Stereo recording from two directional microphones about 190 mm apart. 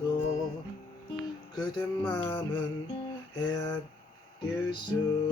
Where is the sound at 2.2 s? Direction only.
20° left (ahead or behind).